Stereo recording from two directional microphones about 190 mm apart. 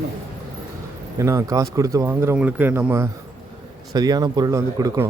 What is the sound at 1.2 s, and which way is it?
Speech, 15° right (ahead or behind).